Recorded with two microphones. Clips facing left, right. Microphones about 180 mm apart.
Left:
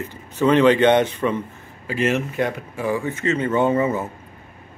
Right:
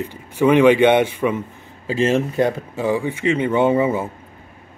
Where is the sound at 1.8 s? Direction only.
25° right (ahead or behind).